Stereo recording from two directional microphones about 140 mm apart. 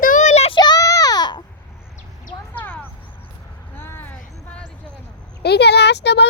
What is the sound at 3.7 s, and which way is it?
Vehicle, 15° left (ahead or behind).